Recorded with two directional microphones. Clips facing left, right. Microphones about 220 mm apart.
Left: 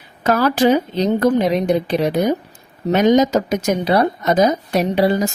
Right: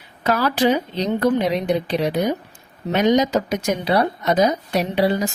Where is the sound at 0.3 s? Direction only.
45° left (ahead or behind).